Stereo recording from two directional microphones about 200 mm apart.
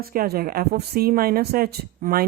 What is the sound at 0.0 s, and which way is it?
A woman's voice, 50° right (ahead or behind).